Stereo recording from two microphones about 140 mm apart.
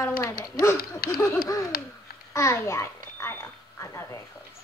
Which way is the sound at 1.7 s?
90° left.